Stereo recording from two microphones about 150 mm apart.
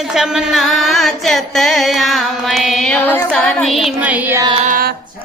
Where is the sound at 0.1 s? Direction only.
5° right (ahead or behind).